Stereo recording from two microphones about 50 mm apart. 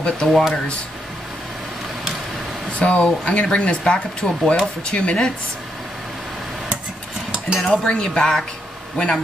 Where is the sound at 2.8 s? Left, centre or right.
Left.